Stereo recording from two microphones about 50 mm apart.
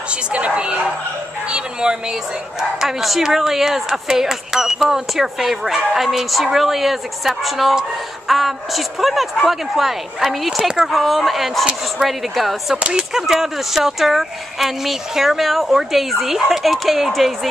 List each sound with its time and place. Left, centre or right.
0.1 s a sound: right
1.5 s bow-wow: centre
2.8 s speech: centre
10.9 s speech: centre
12.7 s speech: right
13.1 s speech: centre